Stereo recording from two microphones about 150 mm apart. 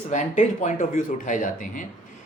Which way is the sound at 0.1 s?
50° left (ahead or behind).